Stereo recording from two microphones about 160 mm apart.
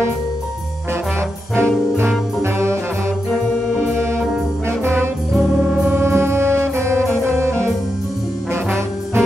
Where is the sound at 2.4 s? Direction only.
15° right (ahead or behind).